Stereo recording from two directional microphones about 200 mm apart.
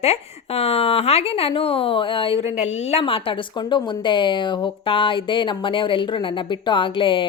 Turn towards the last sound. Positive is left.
turn(degrees=25)  # may be behind; listen again after turning